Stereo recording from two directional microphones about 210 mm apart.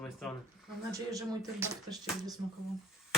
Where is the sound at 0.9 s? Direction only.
15° right (ahead or behind).